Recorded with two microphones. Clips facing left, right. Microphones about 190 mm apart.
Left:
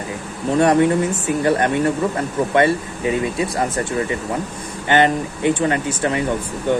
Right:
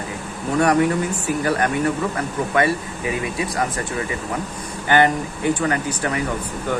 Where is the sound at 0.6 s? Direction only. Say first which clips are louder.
Left 3 dB; 25° left (ahead or behind).